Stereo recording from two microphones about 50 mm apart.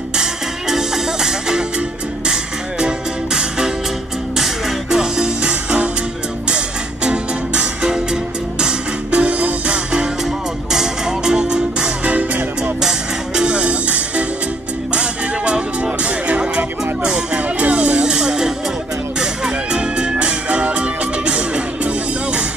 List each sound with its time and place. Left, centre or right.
0.2 s music: centre
3.3 s music: centre
7.1 s music: centre
9.1 s music: right
10.7 s music: centre
12.0 s music: right
12.8 s music: centre